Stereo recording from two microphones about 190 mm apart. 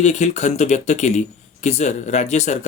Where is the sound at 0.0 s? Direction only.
40° left (ahead or behind).